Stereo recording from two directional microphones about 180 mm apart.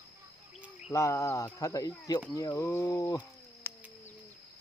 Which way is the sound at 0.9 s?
15° left (ahead or behind).